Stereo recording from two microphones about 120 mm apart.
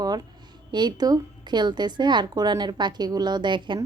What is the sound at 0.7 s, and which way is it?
A woman's voice, 35° right (ahead or behind).